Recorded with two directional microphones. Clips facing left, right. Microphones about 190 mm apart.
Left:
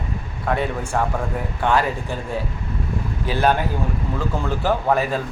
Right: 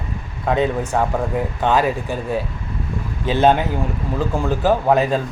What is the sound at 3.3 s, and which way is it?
A man's voice, 25° right (ahead or behind).